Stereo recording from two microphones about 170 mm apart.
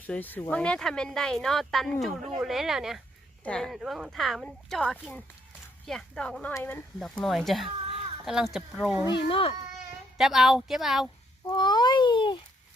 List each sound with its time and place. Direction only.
0.0 s speech: 10° left (ahead or behind)
9.3 s a child's voice: 35° left (ahead or behind)
10.2 s speech: centre (ahead or behind)
11.5 s a sound: 25° left (ahead or behind)